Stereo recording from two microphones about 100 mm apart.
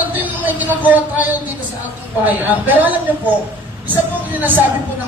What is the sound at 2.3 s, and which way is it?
Speech, 15° right (ahead or behind).